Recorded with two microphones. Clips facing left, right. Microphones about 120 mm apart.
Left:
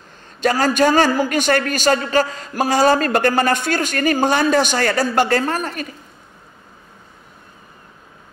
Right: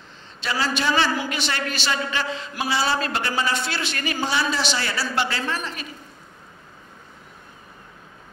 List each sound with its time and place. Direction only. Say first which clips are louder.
0.4 s a man's voice: left 10 dB; 45° left (ahead or behind)